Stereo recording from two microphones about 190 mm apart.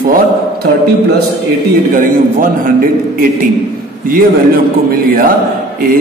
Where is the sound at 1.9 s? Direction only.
45° right (ahead or behind).